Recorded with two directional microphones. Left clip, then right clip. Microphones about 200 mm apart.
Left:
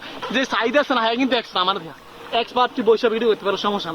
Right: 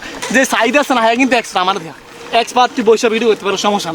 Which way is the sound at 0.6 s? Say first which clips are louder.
Right 7 dB; 65° right (ahead or behind).